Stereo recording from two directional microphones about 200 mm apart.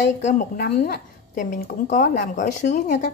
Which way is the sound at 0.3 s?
45° left (ahead or behind).